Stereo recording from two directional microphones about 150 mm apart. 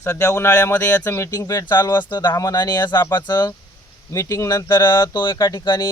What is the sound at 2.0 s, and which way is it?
Speech, 30° left (ahead or behind).